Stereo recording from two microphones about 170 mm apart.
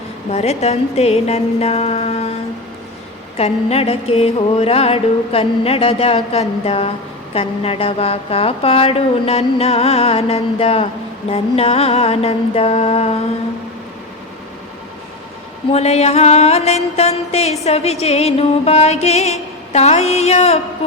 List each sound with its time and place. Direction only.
0.3 s music: 40° left (ahead or behind)
3.3 s music: 35° left (ahead or behind)
15.7 s music: 40° left (ahead or behind)